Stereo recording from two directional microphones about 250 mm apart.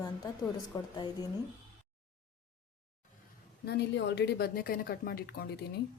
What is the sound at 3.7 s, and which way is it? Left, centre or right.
Speech, left.